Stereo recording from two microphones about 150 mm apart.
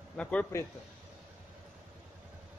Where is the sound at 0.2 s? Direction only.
10° left (ahead or behind).